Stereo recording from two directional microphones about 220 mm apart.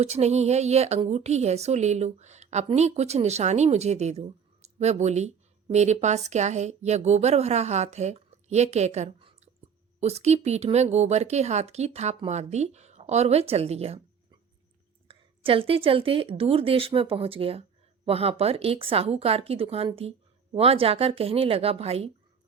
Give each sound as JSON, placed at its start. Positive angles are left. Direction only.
{"t": 0.0, "sound": "a woman's voice", "side_deg": -30}
{"t": 15.0, "sound": "a woman's voice", "side_deg": -25}